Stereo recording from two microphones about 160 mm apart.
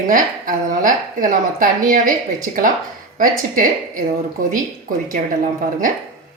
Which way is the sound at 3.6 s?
55° right (ahead or behind).